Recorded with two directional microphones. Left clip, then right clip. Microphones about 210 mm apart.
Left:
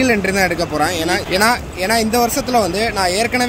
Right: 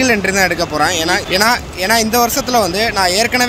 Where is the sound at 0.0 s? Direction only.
5° left (ahead or behind).